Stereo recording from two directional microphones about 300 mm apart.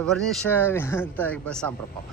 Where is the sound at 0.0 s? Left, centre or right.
Centre.